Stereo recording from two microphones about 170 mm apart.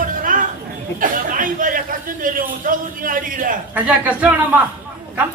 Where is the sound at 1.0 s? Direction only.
55° right (ahead or behind).